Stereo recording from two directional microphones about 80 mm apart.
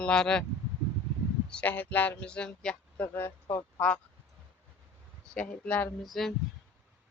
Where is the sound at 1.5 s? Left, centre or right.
Centre.